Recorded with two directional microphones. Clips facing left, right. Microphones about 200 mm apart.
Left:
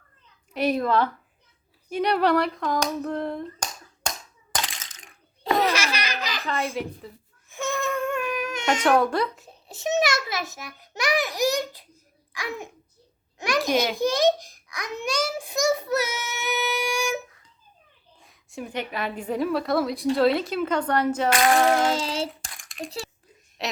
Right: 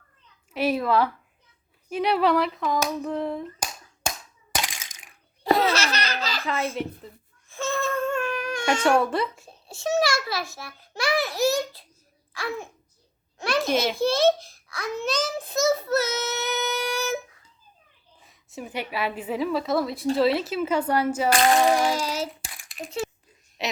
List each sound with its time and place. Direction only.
0.5 s a woman's voice: 5° right (ahead or behind)
1.9 s hands: 5° right (ahead or behind)
4.5 s a sound: 10° right (ahead or behind)
5.4 s laughter: 20° left (ahead or behind)
6.4 s speech: centre (ahead or behind)
7.5 s baby cry: 15° left (ahead or behind)
9.0 s a woman's voice: 5° right (ahead or behind)
9.6 s a child's voice: 20° left (ahead or behind)
13.9 s a child's voice: 15° left (ahead or behind)
18.2 s a woman's voice: centre (ahead or behind)
21.8 s child singing: 25° left (ahead or behind)
22.4 s a sound: 5° right (ahead or behind)
23.6 s speech: centre (ahead or behind)